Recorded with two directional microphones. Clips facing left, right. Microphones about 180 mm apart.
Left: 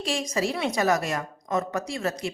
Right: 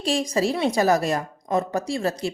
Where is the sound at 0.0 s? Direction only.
35° right (ahead or behind).